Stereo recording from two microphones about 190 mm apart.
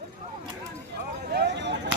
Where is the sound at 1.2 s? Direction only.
55° right (ahead or behind).